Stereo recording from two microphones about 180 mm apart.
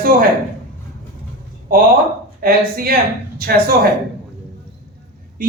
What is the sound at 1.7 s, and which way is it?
A woman's voice, 55° right (ahead or behind).